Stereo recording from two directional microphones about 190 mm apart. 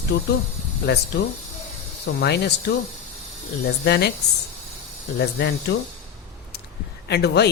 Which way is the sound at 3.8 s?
60° left (ahead or behind).